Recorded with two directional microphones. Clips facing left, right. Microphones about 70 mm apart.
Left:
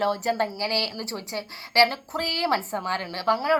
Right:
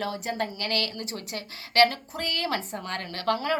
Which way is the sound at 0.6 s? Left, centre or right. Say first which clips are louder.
Left 2 dB; left.